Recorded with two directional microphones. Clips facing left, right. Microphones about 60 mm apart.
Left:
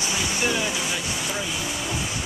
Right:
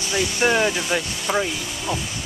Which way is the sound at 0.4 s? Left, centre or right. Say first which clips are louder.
Right 8 dB; right.